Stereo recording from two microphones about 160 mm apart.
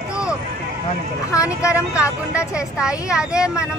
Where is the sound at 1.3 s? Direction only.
20° left (ahead or behind).